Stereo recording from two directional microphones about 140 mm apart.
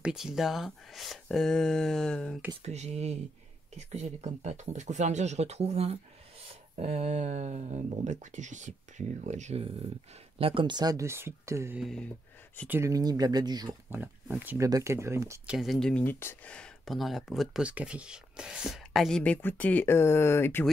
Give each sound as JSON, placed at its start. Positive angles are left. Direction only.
{"t": 0.0, "sound": "speech", "side_deg": -5}
{"t": 2.6, "sound": "speech", "side_deg": -50}
{"t": 10.4, "sound": "speech", "side_deg": -40}
{"t": 11.8, "sound": "speech", "side_deg": 5}
{"t": 12.6, "sound": "speech", "side_deg": -15}
{"t": 12.9, "sound": "speech", "side_deg": -25}
{"t": 13.8, "sound": "speech", "side_deg": -15}
{"t": 15.4, "sound": "speech", "side_deg": 0}